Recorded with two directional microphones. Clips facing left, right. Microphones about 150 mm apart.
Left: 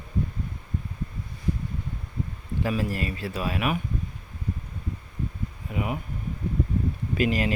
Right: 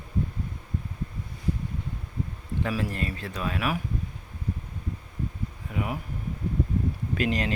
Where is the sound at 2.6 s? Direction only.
5° left (ahead or behind).